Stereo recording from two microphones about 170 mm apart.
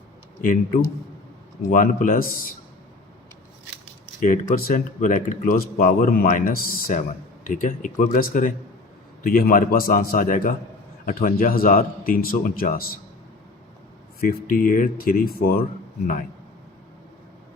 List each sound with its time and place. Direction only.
0.4 s speech: 50° left (ahead or behind)
4.2 s speech: 50° left (ahead or behind)
14.2 s speech: 55° left (ahead or behind)